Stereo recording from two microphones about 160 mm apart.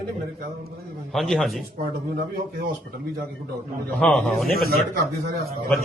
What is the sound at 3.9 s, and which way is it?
Speech, 5° left (ahead or behind).